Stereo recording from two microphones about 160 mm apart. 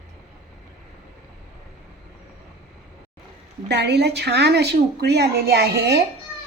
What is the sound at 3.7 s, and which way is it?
A woman's voice, 90° right.